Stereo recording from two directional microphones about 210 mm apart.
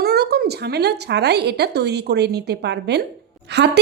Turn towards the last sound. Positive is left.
turn(degrees=-55)  # may be behind; listen again after turning